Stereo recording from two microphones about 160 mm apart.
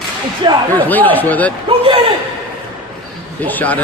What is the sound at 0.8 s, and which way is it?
Speech, 10° left (ahead or behind).